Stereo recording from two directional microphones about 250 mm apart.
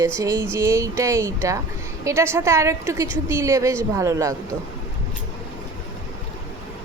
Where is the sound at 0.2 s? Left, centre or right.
Centre.